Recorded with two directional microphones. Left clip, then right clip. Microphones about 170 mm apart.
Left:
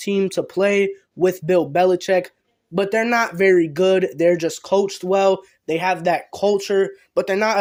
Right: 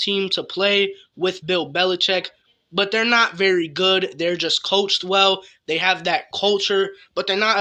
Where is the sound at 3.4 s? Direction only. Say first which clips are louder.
Left 3 dB; 25° left (ahead or behind).